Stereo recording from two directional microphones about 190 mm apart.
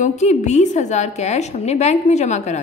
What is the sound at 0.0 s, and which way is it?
A woman's voice, 40° left (ahead or behind).